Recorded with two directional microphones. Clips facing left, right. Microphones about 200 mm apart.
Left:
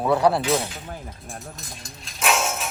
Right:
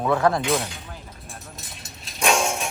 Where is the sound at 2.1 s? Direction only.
Centre (ahead or behind).